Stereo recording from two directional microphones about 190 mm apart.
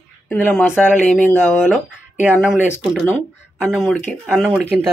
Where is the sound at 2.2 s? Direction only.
5° right (ahead or behind).